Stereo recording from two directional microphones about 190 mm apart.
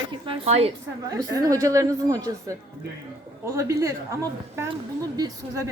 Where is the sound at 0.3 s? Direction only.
35° right (ahead or behind).